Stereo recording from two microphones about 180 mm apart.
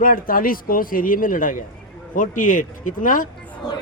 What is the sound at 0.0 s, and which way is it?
Speech, 50° left (ahead or behind).